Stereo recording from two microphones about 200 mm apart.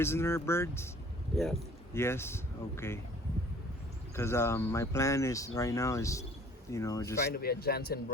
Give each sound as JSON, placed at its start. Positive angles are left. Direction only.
{"t": 0.0, "sound": "speech", "side_deg": 10}
{"t": 1.4, "sound": "speech", "side_deg": 0}
{"t": 1.9, "sound": "speech", "side_deg": 10}
{"t": 4.1, "sound": "speech", "side_deg": 15}
{"t": 7.3, "sound": "a man's voice", "side_deg": 50}